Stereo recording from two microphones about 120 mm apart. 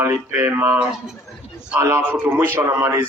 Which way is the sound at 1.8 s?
20° right (ahead or behind).